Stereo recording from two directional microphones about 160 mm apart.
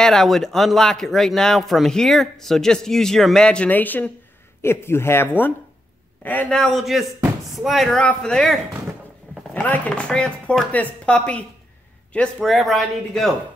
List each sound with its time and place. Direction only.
0.0 s speech: 5° left (ahead or behind)